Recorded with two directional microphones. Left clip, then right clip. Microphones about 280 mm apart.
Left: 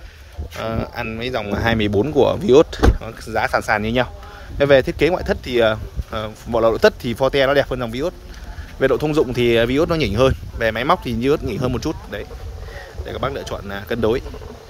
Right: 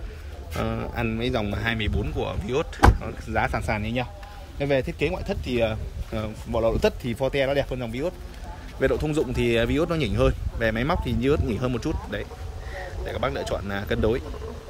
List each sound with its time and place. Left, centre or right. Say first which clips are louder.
0.6 s speech: left 4 dB; centre